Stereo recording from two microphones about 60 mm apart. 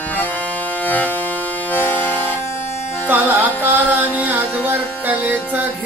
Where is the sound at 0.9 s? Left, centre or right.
Left.